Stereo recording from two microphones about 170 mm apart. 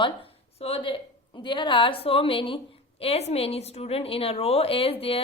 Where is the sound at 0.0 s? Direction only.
35° left (ahead or behind).